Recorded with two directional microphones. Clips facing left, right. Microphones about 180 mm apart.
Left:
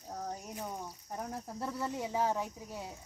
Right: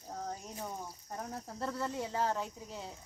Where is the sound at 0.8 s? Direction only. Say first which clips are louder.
Left 2 dB; 5° left (ahead or behind).